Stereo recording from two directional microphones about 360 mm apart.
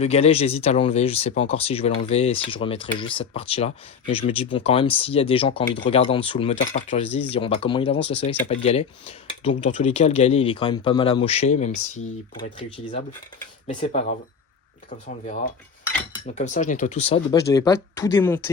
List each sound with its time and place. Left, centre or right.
0.0 s speech: centre
16.2 s speech: centre